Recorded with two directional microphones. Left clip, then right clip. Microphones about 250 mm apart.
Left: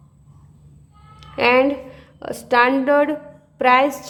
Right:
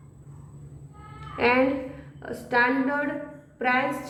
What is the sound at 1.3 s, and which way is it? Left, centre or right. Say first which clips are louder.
A woman's voice: left 6 dB; left.